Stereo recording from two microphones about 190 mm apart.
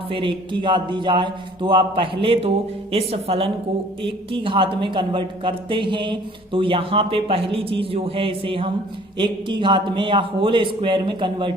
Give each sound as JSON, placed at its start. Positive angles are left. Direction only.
{"t": 0.1, "sound": "a woman's voice", "side_deg": -25}